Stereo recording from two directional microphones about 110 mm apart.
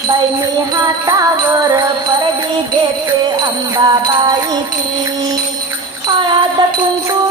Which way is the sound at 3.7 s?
40° right (ahead or behind).